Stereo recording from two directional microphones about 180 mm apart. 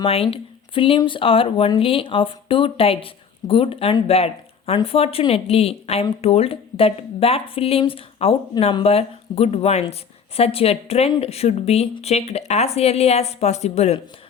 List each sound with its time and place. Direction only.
0.0 s speech: 30° left (ahead or behind)